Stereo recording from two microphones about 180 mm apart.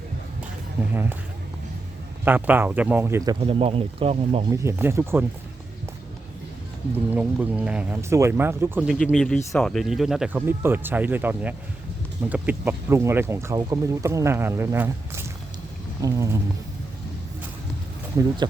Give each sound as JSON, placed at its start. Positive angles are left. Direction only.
{"t": 2.2, "sound": "speech", "side_deg": -10}
{"t": 3.4, "sound": "speech", "side_deg": -30}
{"t": 4.5, "sound": "speech", "side_deg": -15}
{"t": 7.1, "sound": "speech", "side_deg": -5}
{"t": 8.9, "sound": "speech", "side_deg": 0}